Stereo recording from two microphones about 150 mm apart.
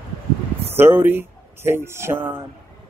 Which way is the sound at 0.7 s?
15° right (ahead or behind).